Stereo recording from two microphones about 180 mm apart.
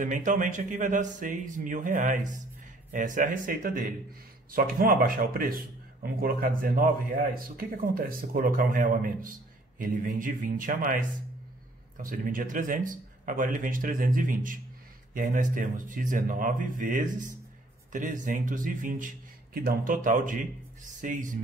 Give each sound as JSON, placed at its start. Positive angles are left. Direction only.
{"t": 0.0, "sound": "a man's voice", "side_deg": -45}